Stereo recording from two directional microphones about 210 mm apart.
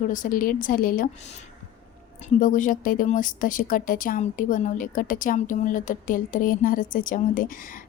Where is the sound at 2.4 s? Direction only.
40° left (ahead or behind).